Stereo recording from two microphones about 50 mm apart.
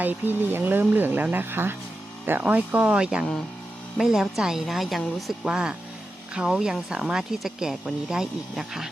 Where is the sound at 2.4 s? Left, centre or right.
Right.